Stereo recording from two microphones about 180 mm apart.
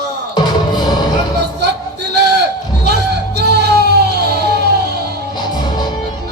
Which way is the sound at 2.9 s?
65° right (ahead or behind).